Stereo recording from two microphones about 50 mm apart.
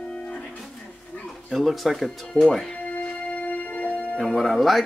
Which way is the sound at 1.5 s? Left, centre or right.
Centre.